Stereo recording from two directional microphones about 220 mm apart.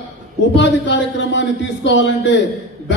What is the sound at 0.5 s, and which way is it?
A man's voice, 55° left (ahead or behind).